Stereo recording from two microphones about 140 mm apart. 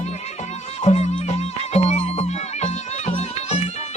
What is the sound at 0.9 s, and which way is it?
Music, 50° left (ahead or behind).